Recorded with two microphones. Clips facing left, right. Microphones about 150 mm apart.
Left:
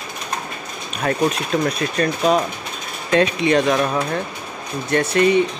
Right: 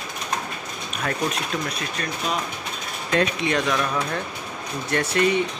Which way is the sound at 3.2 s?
25° left (ahead or behind).